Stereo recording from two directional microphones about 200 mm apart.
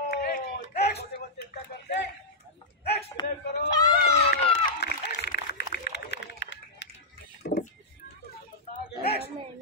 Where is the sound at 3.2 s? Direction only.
25° left (ahead or behind).